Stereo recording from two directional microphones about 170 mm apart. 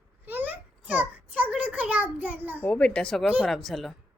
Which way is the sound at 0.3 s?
10° right (ahead or behind).